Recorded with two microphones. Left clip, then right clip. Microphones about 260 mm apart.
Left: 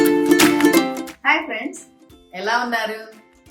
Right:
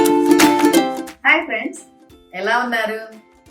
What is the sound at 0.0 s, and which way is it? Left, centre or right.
Music, right.